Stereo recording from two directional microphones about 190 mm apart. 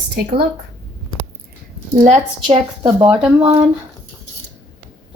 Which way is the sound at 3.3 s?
30° right (ahead or behind).